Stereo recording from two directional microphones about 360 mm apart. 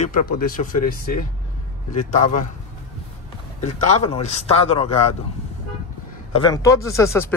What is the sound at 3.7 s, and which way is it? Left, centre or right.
Speech, centre.